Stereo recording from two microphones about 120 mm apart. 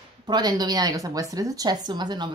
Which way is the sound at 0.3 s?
35° right (ahead or behind).